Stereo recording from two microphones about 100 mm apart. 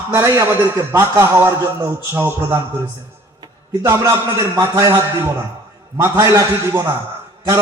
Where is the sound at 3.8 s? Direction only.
25° right (ahead or behind).